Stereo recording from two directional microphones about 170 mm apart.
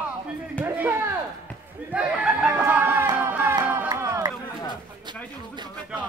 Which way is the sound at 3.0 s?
15° right (ahead or behind).